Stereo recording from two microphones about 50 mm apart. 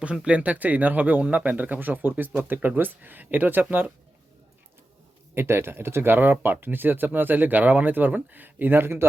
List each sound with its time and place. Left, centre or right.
0.3 s speech: right
5.3 s speech: right